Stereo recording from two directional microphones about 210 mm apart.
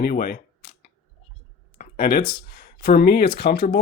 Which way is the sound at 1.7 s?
40° left (ahead or behind).